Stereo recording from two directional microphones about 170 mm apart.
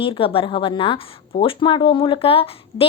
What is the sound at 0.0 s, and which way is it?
Speech, 30° left (ahead or behind).